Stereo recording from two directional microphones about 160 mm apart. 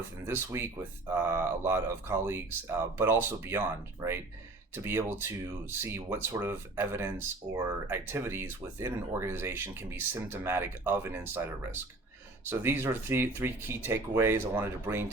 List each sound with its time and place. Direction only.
0.3 s speech: 15° right (ahead or behind)
12.5 s speech: 15° right (ahead or behind)